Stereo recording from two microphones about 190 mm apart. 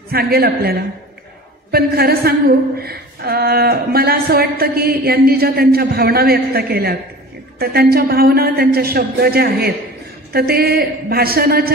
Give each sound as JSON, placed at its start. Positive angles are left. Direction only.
{"t": 0.1, "sound": "speech", "side_deg": -55}